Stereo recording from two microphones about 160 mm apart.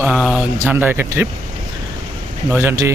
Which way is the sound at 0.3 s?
10° right (ahead or behind).